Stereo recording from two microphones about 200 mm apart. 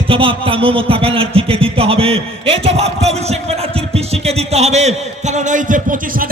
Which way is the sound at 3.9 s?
30° right (ahead or behind).